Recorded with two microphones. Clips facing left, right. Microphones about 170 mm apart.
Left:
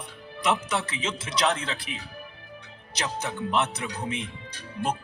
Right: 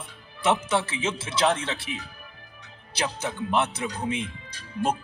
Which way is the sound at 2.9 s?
30° right (ahead or behind).